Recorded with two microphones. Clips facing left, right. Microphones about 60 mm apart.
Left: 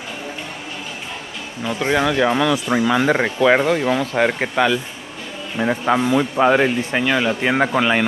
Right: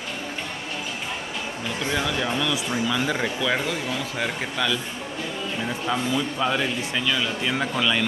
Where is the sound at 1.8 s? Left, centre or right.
Left.